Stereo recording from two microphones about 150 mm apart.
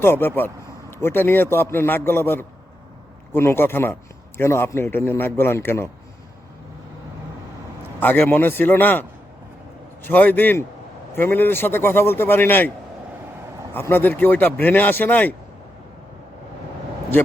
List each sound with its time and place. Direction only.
0.0 s speech: 15° left (ahead or behind)
7.9 s speech: 15° left (ahead or behind)
13.7 s speech: 15° left (ahead or behind)